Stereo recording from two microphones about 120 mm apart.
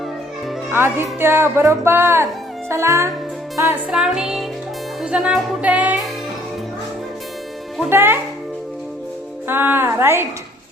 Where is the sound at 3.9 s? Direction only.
5° right (ahead or behind).